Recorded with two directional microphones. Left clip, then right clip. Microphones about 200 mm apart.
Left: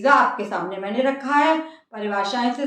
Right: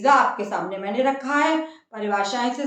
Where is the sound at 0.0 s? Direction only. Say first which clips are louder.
Left 1 dB; 5° right (ahead or behind).